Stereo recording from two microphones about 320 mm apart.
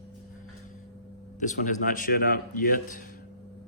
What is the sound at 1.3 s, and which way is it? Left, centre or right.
A man's voice, left.